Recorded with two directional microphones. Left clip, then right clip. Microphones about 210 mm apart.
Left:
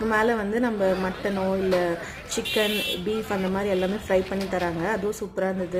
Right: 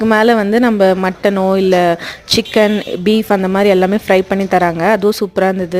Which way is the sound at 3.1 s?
45° right (ahead or behind).